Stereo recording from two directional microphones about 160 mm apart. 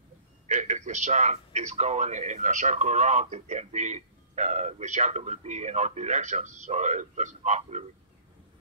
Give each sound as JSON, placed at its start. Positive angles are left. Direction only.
{"t": 0.5, "sound": "speech", "side_deg": -45}